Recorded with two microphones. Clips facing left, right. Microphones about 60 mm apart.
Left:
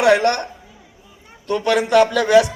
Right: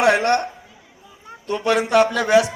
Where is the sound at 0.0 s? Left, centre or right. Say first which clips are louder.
Left 2 dB; right.